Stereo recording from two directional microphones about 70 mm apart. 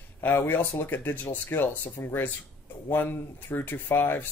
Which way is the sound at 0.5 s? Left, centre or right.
Left.